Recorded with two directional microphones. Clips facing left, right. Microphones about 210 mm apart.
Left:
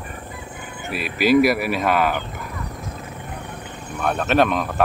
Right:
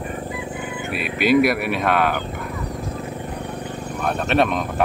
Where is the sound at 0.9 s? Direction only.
Centre (ahead or behind).